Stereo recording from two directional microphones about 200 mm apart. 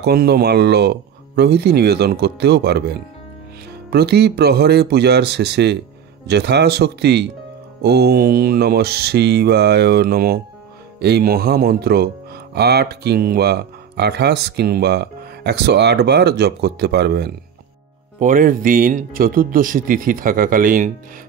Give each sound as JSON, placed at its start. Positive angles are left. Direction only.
{"t": 0.0, "sound": "speech", "side_deg": -55}
{"t": 18.2, "sound": "speech", "side_deg": -45}